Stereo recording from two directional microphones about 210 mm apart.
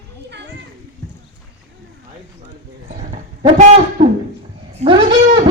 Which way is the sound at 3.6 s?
35° right (ahead or behind).